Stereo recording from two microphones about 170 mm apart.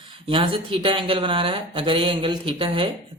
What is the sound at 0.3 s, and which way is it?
Speech, 30° right (ahead or behind).